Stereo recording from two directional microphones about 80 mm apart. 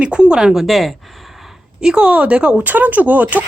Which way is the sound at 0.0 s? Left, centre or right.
Centre.